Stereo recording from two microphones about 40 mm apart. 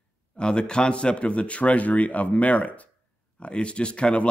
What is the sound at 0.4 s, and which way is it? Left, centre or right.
A man's voice, left.